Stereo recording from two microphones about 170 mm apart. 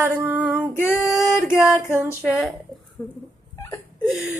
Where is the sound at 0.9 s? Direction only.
15° left (ahead or behind).